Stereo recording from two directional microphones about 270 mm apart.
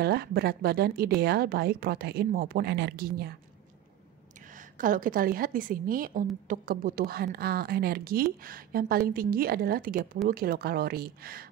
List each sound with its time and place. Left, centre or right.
0.0 s a woman's voice: right
4.6 s a woman's voice: right